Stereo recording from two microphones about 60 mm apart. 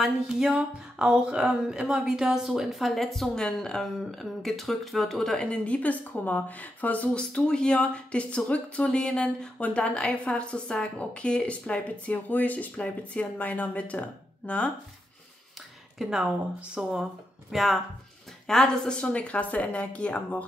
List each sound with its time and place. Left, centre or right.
0.0 s speech: centre; by 14.7 s left
16.0 s speech: centre
18.5 s speech: centre